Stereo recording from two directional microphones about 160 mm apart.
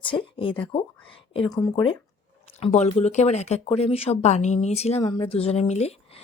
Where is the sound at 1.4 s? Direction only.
25° left (ahead or behind); by 6.2 s 40° left (ahead or behind).